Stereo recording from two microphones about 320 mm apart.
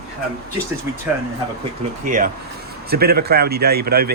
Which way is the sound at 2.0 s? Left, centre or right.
Right.